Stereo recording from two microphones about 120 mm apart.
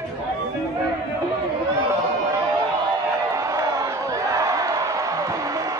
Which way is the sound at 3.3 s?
25° right (ahead or behind).